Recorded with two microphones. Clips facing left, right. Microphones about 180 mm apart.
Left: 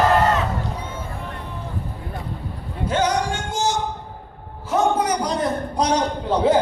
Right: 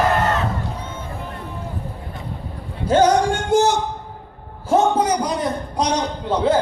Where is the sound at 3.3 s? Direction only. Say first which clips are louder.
Right 7 dB; 55° right (ahead or behind).